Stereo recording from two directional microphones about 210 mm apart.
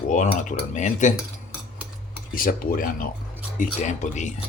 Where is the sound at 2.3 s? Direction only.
40° left (ahead or behind).